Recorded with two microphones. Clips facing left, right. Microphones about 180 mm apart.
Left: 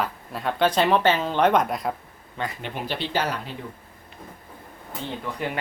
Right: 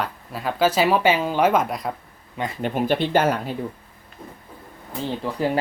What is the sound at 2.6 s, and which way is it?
Speech, 50° right (ahead or behind).